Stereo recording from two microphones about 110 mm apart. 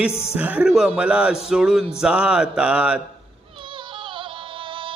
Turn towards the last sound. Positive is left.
turn(degrees=-50)  # may be behind; listen again after turning